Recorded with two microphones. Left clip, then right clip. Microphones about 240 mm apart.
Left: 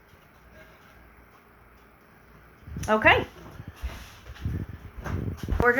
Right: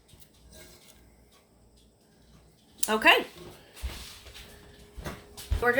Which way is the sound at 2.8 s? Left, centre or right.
Right.